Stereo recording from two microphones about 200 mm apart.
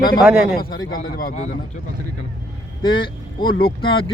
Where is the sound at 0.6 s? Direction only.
45° left (ahead or behind).